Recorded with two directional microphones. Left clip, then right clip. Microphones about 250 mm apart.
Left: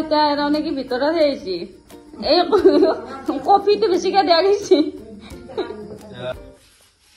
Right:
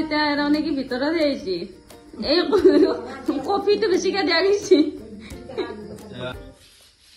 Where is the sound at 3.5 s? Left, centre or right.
Centre.